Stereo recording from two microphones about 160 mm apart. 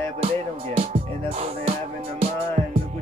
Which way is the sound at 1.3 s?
40° right (ahead or behind).